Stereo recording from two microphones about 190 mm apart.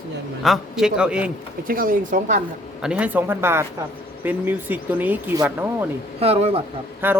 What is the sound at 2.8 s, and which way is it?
Speech, 5° right (ahead or behind).